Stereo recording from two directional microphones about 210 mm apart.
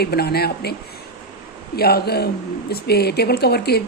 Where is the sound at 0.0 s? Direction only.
50° left (ahead or behind).